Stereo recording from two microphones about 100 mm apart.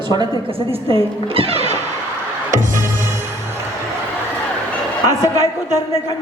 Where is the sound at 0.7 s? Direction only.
70° right (ahead or behind); by 1.8 s 85° right.